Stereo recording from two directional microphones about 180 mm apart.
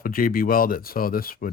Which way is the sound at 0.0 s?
55° left (ahead or behind).